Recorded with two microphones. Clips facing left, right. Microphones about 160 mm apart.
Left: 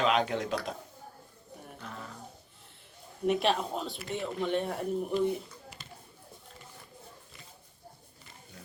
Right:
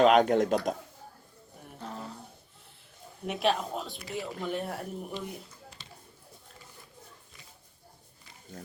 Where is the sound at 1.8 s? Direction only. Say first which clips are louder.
Right 5 dB; 35° right (ahead or behind).